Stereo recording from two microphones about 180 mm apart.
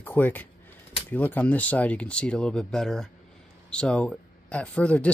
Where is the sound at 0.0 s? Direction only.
10° left (ahead or behind).